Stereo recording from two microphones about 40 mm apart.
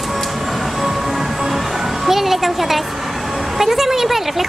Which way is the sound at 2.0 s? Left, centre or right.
Centre.